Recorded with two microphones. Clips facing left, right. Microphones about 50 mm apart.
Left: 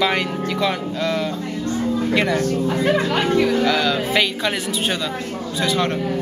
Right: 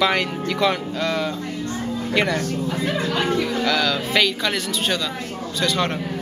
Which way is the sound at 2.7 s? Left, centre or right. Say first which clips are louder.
Left 4 dB; left.